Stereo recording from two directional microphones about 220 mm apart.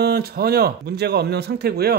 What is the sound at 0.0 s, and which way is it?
Speech, 45° right (ahead or behind).